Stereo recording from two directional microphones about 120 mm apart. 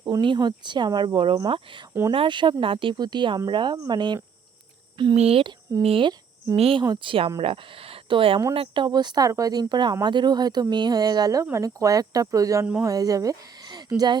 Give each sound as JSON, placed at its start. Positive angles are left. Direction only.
{"t": 0.0, "sound": "speech", "side_deg": -40}
{"t": 5.1, "sound": "speech", "side_deg": -55}
{"t": 6.8, "sound": "speech", "side_deg": -40}